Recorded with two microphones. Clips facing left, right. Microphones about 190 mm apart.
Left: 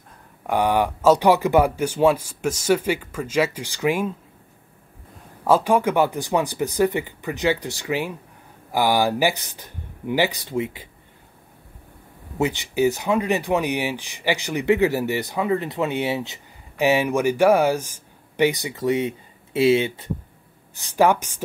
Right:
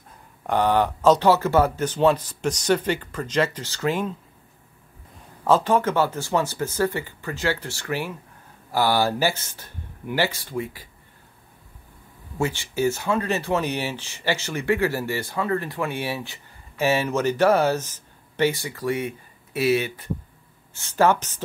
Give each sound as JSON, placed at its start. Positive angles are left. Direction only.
{"t": 0.5, "sound": "speech", "side_deg": 10}
{"t": 5.4, "sound": "speech", "side_deg": 10}
{"t": 12.4, "sound": "speech", "side_deg": 20}